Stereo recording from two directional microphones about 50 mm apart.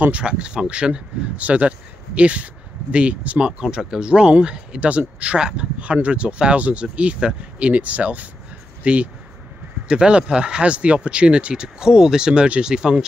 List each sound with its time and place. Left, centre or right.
0.2 s speech: centre